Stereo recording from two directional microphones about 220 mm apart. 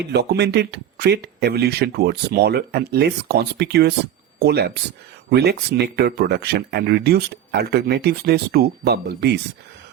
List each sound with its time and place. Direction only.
0.1 s speech: 50° right (ahead or behind)